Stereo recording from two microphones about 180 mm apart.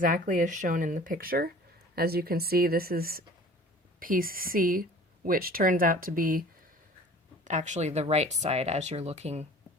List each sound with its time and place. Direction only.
0.0 s speech: 45° right (ahead or behind)
7.4 s speech: 40° right (ahead or behind)